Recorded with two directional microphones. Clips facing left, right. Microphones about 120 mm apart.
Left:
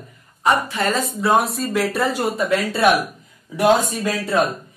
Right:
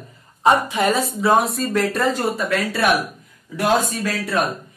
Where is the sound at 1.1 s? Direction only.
Centre (ahead or behind); by 2.9 s 20° left (ahead or behind).